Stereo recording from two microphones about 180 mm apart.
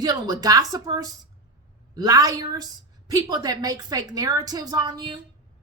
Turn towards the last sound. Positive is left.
turn(degrees=-25)  # may be behind; listen again after turning